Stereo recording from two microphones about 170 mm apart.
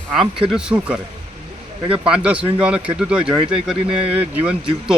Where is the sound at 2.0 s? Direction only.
5° right (ahead or behind).